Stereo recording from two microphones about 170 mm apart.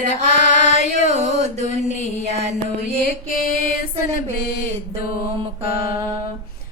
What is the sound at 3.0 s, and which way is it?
Mantra, 60° left (ahead or behind).